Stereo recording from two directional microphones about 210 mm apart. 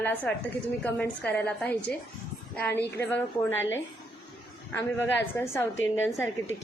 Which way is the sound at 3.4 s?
60° left (ahead or behind).